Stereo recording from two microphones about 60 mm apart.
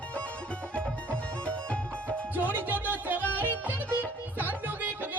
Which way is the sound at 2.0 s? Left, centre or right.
Right.